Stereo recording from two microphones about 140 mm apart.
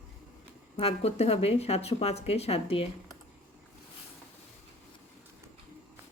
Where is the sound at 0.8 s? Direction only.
45° left (ahead or behind).